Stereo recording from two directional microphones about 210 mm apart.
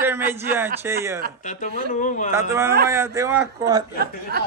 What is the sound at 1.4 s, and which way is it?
Speech, 35° left (ahead or behind).